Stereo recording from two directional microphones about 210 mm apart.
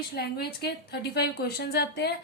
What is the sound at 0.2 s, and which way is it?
A woman's voice, 50° left (ahead or behind).